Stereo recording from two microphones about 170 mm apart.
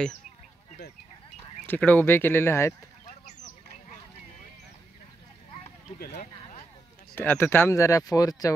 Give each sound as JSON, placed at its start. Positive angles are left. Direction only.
{"t": 1.7, "sound": "speech", "side_deg": 10}
{"t": 3.1, "sound": "a sound", "side_deg": 45}
{"t": 5.9, "sound": "speech", "side_deg": 65}
{"t": 7.2, "sound": "speech", "side_deg": 15}